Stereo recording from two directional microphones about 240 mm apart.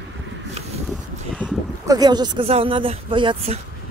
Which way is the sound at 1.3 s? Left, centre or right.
Centre.